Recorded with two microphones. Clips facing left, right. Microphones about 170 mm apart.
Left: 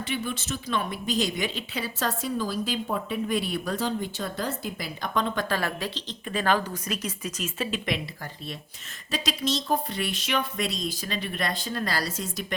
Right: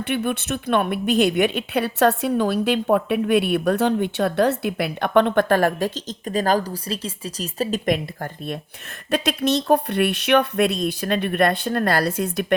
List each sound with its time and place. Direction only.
0.0 s speech: 60° right (ahead or behind)